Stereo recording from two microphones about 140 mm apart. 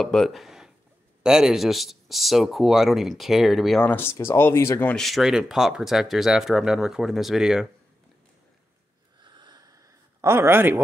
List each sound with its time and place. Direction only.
0.0 s speech: centre (ahead or behind)
3.9 s speech: 15° left (ahead or behind)
4.9 s speech: centre (ahead or behind)
9.2 s a sound: 30° right (ahead or behind); by 10.8 s 15° right (ahead or behind)